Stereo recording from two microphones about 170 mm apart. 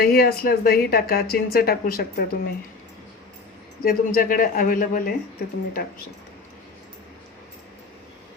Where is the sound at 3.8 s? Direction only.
55° left (ahead or behind).